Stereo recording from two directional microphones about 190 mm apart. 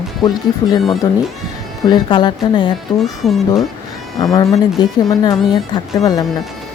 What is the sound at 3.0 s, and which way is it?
Speech, centre (ahead or behind).